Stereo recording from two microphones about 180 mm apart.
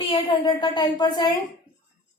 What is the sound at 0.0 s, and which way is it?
A woman's voice, 25° left (ahead or behind).